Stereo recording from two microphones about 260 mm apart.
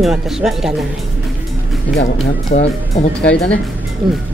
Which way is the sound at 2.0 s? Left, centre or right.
Left.